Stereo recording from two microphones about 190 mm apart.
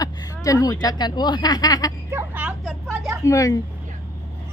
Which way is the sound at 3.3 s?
15° left (ahead or behind).